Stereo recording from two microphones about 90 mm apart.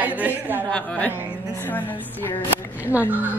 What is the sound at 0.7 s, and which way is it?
A woman's voice, 10° left (ahead or behind).